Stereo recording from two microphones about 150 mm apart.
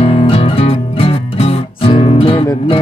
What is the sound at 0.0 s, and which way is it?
Music, 40° left (ahead or behind).